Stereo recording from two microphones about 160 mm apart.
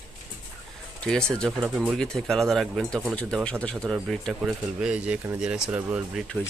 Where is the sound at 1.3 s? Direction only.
5° left (ahead or behind).